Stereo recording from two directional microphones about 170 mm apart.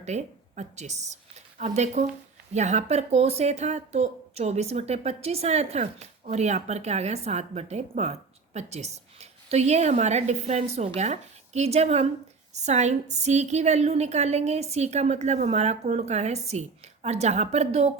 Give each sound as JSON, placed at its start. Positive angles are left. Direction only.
{"t": 0.0, "sound": "a woman's voice", "side_deg": -40}